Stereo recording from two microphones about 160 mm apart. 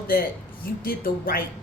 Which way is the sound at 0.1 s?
65° left (ahead or behind).